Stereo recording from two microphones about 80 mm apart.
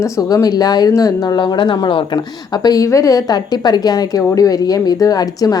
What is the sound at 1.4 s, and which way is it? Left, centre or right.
Speech, left.